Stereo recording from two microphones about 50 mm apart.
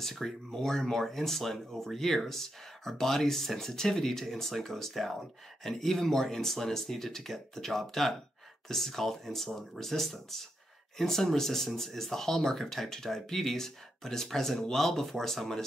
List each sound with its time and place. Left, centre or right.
0.0 s speech: centre